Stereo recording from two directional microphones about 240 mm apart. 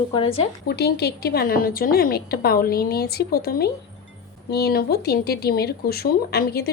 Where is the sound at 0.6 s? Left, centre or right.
Left.